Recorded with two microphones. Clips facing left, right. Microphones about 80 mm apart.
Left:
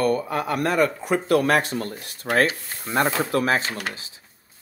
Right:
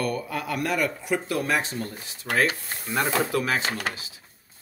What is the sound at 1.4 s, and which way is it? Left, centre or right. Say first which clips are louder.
Speech: left 5 dB; left.